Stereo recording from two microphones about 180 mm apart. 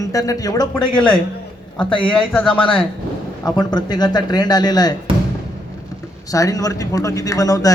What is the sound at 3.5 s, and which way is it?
Speech, 25° left (ahead or behind).